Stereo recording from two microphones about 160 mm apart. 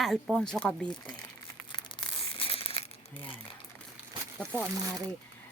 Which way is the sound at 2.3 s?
35° left (ahead or behind).